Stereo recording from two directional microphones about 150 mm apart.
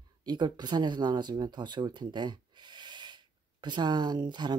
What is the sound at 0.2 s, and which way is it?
Speech, 30° right (ahead or behind).